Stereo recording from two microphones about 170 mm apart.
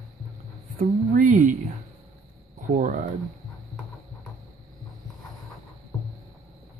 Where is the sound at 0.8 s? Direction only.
50° right (ahead or behind).